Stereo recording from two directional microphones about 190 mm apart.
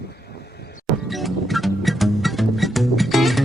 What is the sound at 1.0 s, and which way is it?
Music, centre (ahead or behind).